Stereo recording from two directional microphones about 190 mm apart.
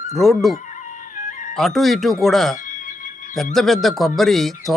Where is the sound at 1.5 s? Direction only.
Centre (ahead or behind).